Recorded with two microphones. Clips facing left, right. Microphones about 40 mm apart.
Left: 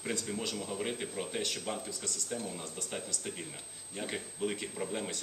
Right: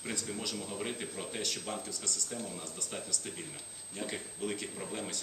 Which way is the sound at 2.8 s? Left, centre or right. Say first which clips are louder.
Left 1 dB; centre.